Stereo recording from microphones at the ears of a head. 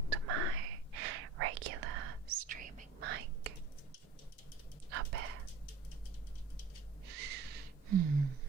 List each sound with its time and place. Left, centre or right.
0.1 s whispering: right
4.9 s a sound: right
7.0 s gasp: right